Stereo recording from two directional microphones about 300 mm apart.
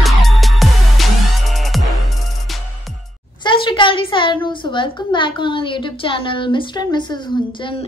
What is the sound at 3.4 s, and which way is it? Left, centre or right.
A woman's voice, centre.